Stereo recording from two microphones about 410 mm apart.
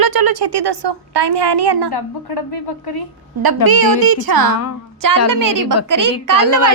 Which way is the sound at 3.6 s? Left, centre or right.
Right.